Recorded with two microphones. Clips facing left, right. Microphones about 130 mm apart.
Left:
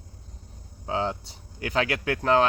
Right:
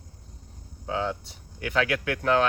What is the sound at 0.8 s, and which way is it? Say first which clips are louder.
Speech: left 1 dB; 35° left (ahead or behind).